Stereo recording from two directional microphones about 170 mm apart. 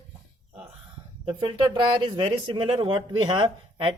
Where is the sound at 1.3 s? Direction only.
25° right (ahead or behind).